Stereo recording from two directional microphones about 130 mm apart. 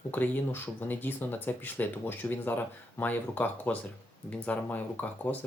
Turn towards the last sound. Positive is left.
turn(degrees=15)  # may be behind; listen again after turning